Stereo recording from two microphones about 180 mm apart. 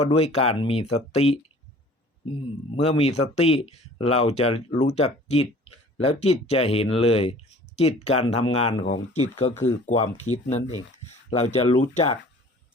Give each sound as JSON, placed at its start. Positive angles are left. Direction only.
{"t": 0.1, "sound": "speech", "side_deg": 35}
{"t": 2.8, "sound": "speech", "side_deg": 35}